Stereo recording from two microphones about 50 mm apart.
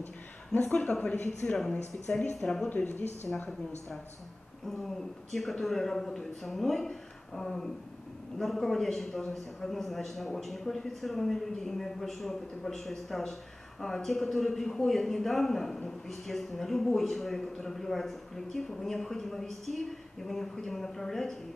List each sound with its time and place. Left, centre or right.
0.6 s a man's voice: left; by 2.7 s centre
4.6 s a man's voice: centre